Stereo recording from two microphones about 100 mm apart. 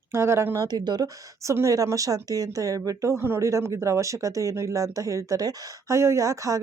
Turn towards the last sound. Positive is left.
turn(degrees=-30)  # may be behind; listen again after turning